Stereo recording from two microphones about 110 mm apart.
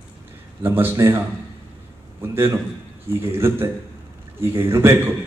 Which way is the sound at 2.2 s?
25° right (ahead or behind).